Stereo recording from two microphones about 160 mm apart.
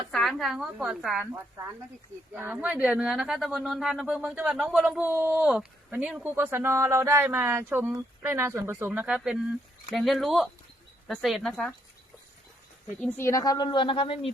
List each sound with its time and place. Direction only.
0.1 s speech: centre (ahead or behind)
2.3 s speech: 10° right (ahead or behind)
13.1 s a woman's voice: 20° left (ahead or behind)